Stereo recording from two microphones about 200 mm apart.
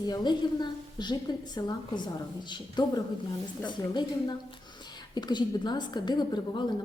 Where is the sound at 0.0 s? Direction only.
20° left (ahead or behind).